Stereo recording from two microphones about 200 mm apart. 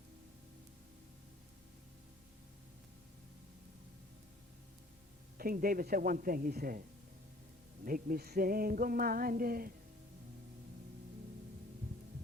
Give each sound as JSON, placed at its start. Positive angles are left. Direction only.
{"t": 5.4, "sound": "female singing", "side_deg": -45}
{"t": 7.9, "sound": "female singing", "side_deg": -45}